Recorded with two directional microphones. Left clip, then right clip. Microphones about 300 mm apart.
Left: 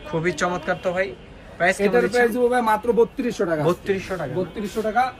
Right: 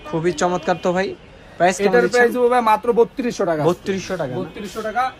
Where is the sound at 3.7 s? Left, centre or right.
Centre.